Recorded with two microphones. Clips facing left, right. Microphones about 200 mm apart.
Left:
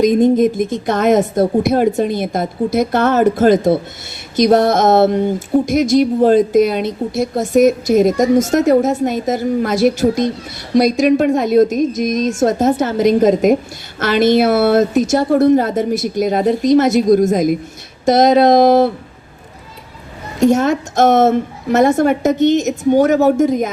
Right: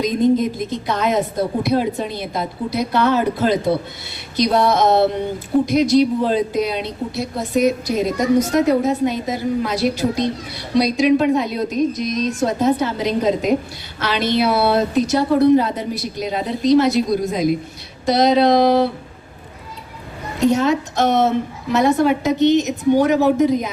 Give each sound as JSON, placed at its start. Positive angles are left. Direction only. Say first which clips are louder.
{"t": 0.0, "sound": "a woman's voice", "louder": "left 5 dB", "side_deg": 50}
{"t": 20.4, "sound": "a woman's voice", "louder": "left 3 dB", "side_deg": 45}